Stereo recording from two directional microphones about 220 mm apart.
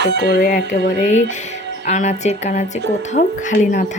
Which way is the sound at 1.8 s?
30° left (ahead or behind).